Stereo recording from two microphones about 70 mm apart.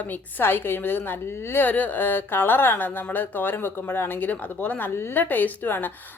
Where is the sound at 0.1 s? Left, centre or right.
Left.